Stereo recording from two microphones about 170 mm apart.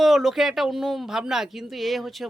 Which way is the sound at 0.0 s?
Centre (ahead or behind).